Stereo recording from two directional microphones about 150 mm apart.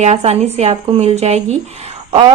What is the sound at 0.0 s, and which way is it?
A woman's voice, 45° right (ahead or behind).